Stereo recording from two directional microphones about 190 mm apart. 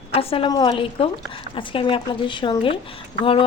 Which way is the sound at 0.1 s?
30° left (ahead or behind).